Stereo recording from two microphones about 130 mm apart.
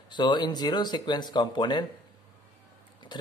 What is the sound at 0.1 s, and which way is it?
Speech, 35° left (ahead or behind).